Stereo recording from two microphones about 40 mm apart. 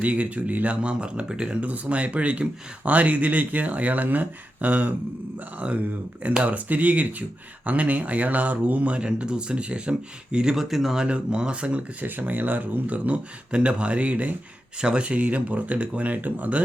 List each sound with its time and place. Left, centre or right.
0.0 s speech: right
1.6 s speech: right
9.1 s speech: right
10.5 s speech: centre
11.0 s speech: right
12.0 s speech: right
13.5 s speech: right
14.8 s speech: right